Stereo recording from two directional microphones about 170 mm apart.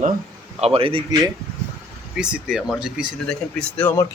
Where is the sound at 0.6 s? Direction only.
35° right (ahead or behind).